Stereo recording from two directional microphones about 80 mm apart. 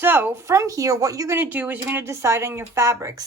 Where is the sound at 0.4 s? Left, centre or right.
Right.